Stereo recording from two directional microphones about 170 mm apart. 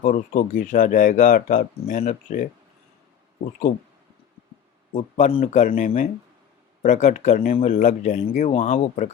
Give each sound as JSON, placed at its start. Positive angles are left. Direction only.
{"t": 0.0, "sound": "speech", "side_deg": 50}
{"t": 5.1, "sound": "speech", "side_deg": 45}